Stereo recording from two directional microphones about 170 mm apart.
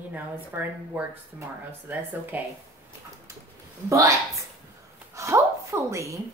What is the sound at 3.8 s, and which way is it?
Speech, 20° right (ahead or behind).